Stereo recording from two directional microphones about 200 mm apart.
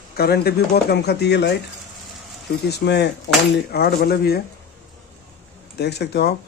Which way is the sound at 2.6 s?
55° left (ahead or behind).